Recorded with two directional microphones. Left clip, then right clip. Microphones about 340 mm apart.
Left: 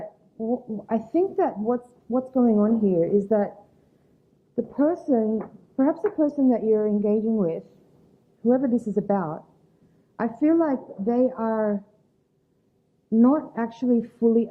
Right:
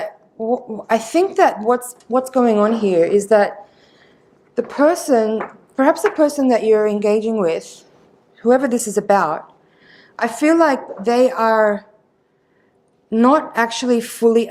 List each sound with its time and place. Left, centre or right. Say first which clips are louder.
0.3 s a woman's voice: right 8 dB; centre
0.9 s speech: right 8 dB; centre
13.1 s speech: right 8 dB; centre